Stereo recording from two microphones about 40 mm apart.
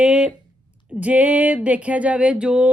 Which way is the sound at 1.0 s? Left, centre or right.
Right.